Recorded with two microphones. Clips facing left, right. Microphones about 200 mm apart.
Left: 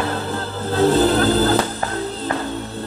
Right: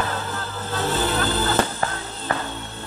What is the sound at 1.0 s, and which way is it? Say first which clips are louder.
Music: left 8 dB; 40° left (ahead or behind).